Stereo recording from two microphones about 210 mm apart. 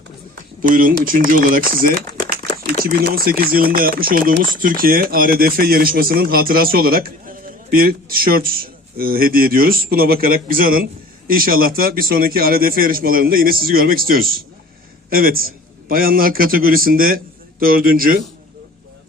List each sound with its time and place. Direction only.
0.7 s a man's voice: 40° right (ahead or behind)